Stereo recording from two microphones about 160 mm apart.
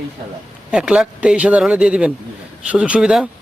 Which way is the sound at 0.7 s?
5° right (ahead or behind).